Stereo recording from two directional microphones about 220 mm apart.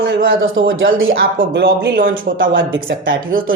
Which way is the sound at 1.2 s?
40° right (ahead or behind).